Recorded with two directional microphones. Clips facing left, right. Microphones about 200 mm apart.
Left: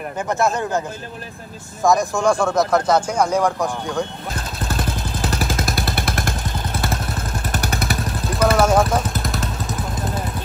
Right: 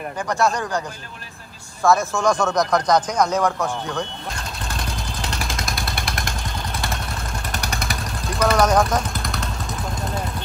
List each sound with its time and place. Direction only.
0.6 s speech: 25° left (ahead or behind)
4.3 s vehicle: 5° left (ahead or behind)
6.0 s vehicle: 55° left (ahead or behind)
7.5 s vehicle: 5° left (ahead or behind)